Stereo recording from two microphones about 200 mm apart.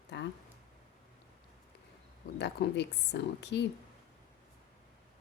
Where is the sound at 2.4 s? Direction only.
55° left (ahead or behind).